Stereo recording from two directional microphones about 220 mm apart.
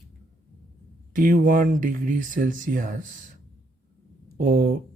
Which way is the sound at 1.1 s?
40° right (ahead or behind).